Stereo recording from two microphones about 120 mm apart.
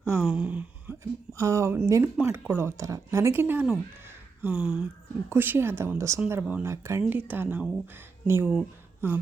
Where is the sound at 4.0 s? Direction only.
20° right (ahead or behind).